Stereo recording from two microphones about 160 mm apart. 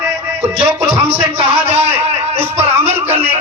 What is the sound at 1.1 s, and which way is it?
Speech, 35° right (ahead or behind).